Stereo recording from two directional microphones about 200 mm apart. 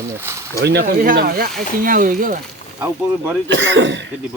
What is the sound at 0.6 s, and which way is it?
Speech, 55° right (ahead or behind).